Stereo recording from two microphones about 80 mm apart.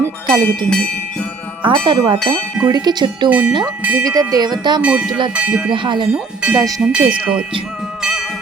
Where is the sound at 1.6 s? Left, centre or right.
Right.